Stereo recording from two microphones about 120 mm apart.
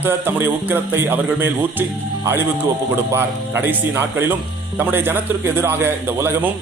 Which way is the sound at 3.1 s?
20° right (ahead or behind).